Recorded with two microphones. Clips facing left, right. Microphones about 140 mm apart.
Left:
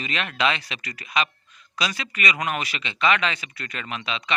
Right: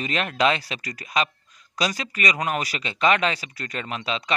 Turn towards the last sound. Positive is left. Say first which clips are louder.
# right 2 dB
turn(degrees=-40)  # may be behind; listen again after turning